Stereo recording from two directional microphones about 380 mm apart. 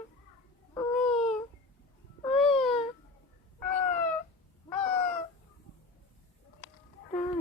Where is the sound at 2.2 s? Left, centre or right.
Centre.